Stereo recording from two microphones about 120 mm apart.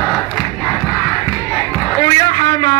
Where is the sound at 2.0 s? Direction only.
35° left (ahead or behind).